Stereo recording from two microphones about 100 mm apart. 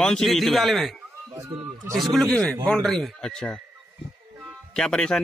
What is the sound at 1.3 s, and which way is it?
Speech, 25° right (ahead or behind).